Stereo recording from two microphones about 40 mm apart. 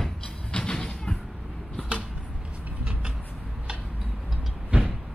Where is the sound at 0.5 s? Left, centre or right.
Left.